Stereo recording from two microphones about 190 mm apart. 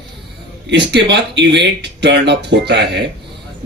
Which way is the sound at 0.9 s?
65° right (ahead or behind).